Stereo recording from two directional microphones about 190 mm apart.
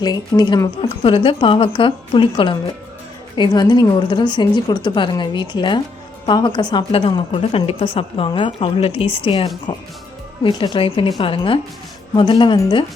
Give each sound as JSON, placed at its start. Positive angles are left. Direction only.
{"t": 0.0, "sound": "speech", "side_deg": 20}